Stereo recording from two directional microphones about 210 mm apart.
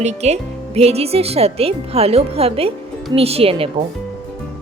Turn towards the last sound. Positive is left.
turn(degrees=-25)  # may be behind; listen again after turning